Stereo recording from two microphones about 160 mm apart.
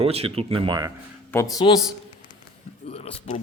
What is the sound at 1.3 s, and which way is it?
Speech, 10° left (ahead or behind).